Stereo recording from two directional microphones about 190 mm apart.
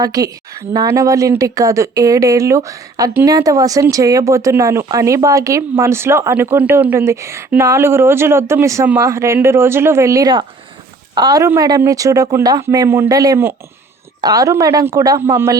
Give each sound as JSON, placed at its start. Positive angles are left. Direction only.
{"t": 0.0, "sound": "a woman's voice", "side_deg": -20}